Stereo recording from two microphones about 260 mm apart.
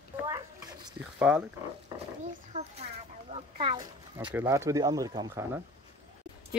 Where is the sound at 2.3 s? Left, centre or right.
Right.